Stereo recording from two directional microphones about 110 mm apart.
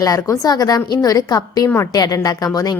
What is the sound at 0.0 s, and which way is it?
A woman's voice, 30° left (ahead or behind).